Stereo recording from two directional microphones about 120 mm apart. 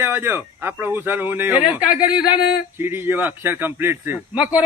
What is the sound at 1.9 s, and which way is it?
Speech, 40° left (ahead or behind).